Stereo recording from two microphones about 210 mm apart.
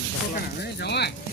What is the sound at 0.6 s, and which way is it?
Speech, 55° left (ahead or behind).